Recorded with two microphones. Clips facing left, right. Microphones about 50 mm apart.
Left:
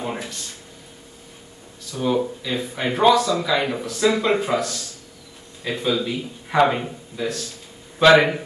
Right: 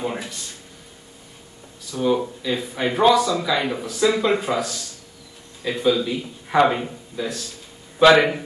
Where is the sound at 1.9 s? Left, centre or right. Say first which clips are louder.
Right 1 dB; centre.